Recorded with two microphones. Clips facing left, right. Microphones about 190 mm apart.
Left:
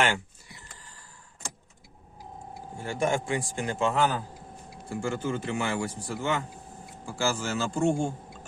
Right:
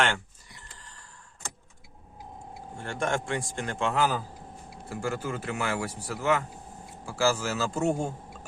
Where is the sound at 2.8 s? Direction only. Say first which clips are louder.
Left 2 dB; 5° left (ahead or behind).